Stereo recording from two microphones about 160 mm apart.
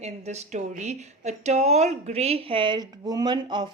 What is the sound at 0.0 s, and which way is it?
Speech, 45° right (ahead or behind).